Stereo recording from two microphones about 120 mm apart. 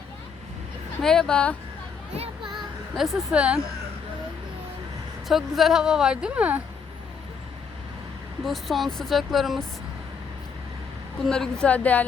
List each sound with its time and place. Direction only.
1.0 s a woman's voice: 5° left (ahead or behind)
2.1 s music: 55° right (ahead or behind)
2.5 s a sound: centre (ahead or behind)
5.3 s a woman's voice: centre (ahead or behind)
8.4 s a woman's voice: centre (ahead or behind)
11.3 s a woman's voice: 5° left (ahead or behind)